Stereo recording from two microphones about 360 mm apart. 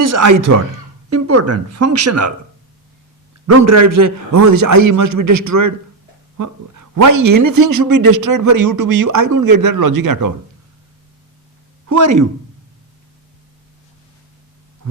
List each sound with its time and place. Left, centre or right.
0.0 s speech: right
3.4 s a man's voice: right
7.4 s speech: right
11.9 s a man's voice: right